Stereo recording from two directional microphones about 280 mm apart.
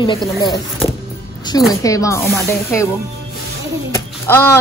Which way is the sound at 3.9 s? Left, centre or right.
Centre.